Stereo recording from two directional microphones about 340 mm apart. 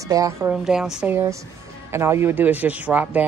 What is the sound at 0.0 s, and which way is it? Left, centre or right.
A woman's voice, centre.